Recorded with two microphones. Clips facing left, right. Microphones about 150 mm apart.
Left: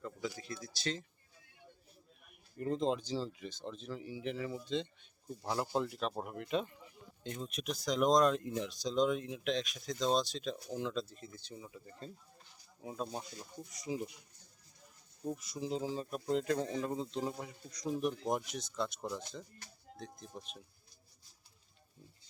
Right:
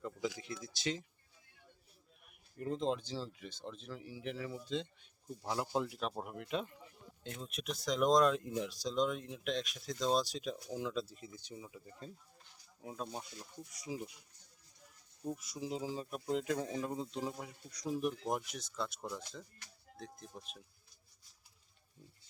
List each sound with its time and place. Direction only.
0.3 s speech: 20° right (ahead or behind)
2.6 s speech: centre (ahead or behind)
12.8 s speech: centre (ahead or behind)
15.4 s speech: 5° right (ahead or behind)